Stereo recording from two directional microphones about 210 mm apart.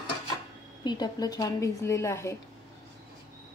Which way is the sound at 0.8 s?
20° left (ahead or behind).